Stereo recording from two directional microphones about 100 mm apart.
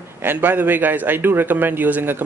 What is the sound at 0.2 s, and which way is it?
A man's voice, 20° right (ahead or behind).